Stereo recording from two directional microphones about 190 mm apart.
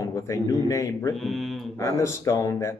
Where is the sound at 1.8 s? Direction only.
15° left (ahead or behind).